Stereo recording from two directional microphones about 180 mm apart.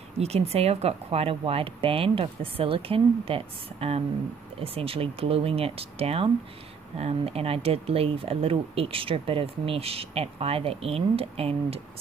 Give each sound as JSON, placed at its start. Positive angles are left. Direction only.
{"t": 0.2, "sound": "speech", "side_deg": -35}